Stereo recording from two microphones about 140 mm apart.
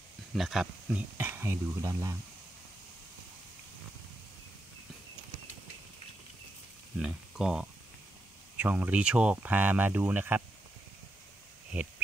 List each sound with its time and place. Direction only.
0.3 s speech: centre (ahead or behind)
1.1 s speech: 15° right (ahead or behind)
7.0 s speech: 5° right (ahead or behind)